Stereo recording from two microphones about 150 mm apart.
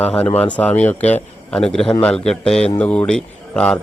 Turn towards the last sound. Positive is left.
turn(degrees=5)  # may be behind; listen again after turning